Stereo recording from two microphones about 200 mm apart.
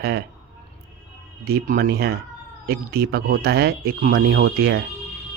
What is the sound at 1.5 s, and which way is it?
Speech, 50° right (ahead or behind).